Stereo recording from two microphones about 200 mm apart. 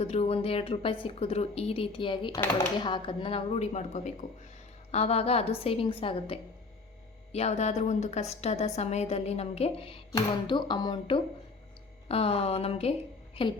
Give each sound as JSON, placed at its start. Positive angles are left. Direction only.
{"t": 0.0, "sound": "a woman's voice", "side_deg": 30}